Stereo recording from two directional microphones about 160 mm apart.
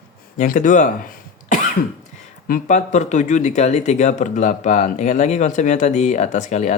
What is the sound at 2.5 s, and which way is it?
Speech, 50° left (ahead or behind).